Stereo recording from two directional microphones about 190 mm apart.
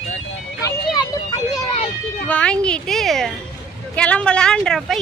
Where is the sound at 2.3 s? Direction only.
5° left (ahead or behind).